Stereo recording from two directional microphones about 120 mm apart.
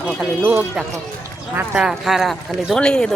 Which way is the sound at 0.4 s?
10° right (ahead or behind).